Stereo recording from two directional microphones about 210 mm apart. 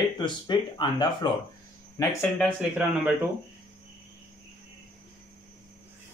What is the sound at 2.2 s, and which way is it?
Speech, centre (ahead or behind).